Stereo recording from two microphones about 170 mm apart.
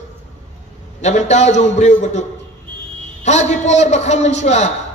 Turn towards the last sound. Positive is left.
turn(degrees=40)  # may be behind; listen again after turning